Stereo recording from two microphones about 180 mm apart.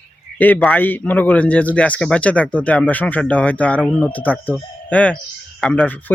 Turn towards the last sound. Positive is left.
turn(degrees=5)  # may be behind; listen again after turning